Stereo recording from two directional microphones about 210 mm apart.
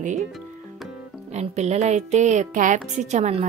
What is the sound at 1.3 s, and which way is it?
Speech, 30° right (ahead or behind).